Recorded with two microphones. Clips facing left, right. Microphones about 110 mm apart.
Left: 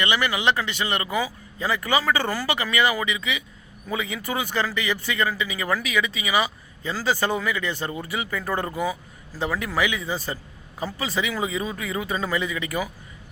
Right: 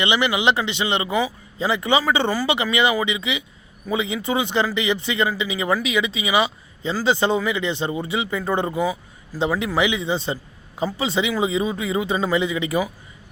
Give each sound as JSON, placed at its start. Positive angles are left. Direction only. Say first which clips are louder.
{"t": 0.0, "sound": "speech", "louder": "right 3 dB", "side_deg": -20}